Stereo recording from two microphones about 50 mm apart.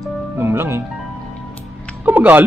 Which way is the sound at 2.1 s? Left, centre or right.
Right.